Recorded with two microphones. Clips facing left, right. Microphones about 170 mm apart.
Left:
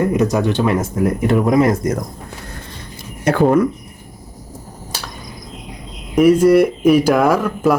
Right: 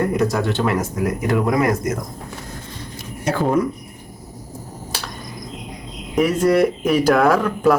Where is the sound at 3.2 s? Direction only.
65° left (ahead or behind).